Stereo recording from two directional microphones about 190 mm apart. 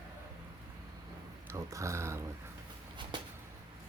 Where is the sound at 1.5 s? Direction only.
15° right (ahead or behind).